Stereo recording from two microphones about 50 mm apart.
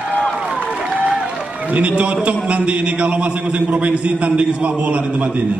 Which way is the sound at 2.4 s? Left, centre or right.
Right.